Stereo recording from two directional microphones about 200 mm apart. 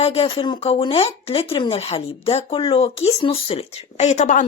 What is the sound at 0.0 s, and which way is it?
Speech, 30° left (ahead or behind).